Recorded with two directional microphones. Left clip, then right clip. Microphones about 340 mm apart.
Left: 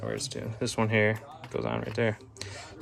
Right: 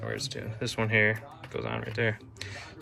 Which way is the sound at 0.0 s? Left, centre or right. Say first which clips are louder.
Left 1 dB; left.